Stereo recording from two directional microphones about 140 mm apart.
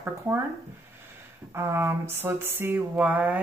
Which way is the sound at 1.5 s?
15° right (ahead or behind).